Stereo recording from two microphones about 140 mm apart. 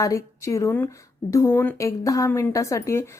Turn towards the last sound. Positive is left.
turn(degrees=20)  # may be behind; listen again after turning